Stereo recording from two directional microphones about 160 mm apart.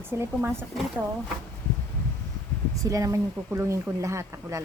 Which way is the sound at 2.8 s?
20° right (ahead or behind).